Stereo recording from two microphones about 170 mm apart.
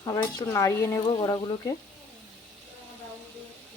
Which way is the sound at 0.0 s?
25° left (ahead or behind).